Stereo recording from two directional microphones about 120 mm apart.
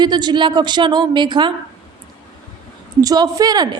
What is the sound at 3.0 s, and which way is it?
Speech, 30° right (ahead or behind).